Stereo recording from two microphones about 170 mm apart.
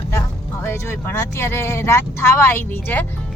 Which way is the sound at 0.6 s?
15° left (ahead or behind).